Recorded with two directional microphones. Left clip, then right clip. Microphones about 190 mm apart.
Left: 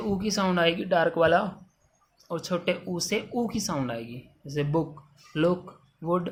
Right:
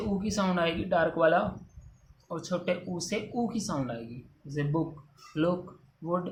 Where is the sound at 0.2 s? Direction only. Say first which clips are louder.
Left 4 dB; 45° left (ahead or behind).